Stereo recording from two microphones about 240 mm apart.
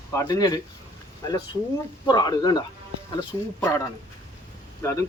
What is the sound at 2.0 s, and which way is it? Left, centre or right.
Speech, centre.